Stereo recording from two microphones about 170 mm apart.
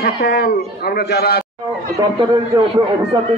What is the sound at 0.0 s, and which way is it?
A man's voice, 70° left (ahead or behind).